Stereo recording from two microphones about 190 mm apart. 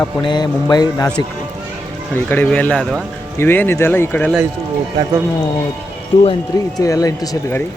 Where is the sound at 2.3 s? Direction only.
10° left (ahead or behind).